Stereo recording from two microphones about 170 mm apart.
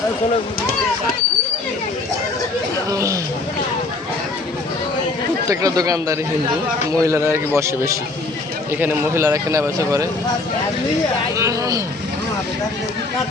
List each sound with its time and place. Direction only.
2.9 s a man's voice: 20° right (ahead or behind)
5.5 s a man's voice: 20° right (ahead or behind)
11.3 s speech: 20° right (ahead or behind)